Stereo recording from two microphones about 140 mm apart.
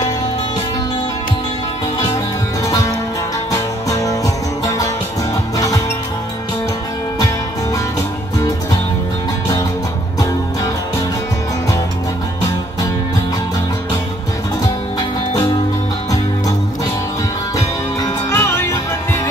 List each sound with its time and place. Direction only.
3.5 s music: 25° left (ahead or behind)
17.6 s music: 20° left (ahead or behind)